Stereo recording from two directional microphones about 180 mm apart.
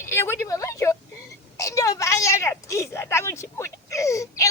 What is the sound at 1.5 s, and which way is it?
A woman's voice, 15° left (ahead or behind).